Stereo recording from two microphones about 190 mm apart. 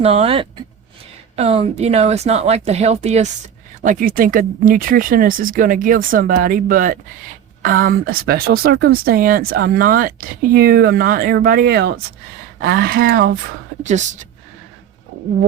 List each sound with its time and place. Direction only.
0.0 s speech: 30° right (ahead or behind); by 13.4 s 50° right (ahead or behind)
13.8 s speech: 40° right (ahead or behind)